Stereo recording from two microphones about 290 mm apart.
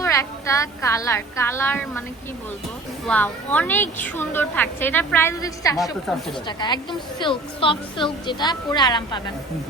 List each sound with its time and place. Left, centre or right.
0.0 s a woman's voice: centre
3.1 s a woman's voice: centre
6.1 s a woman's voice: centre
6.6 s a woman's voice: centre